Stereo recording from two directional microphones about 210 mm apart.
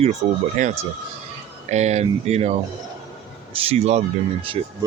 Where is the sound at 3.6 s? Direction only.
30° right (ahead or behind).